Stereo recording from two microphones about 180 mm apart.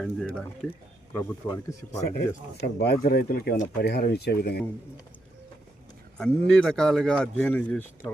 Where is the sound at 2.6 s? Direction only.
60° left (ahead or behind).